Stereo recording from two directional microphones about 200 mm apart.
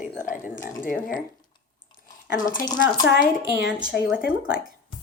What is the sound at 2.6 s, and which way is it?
Speech, 20° left (ahead or behind).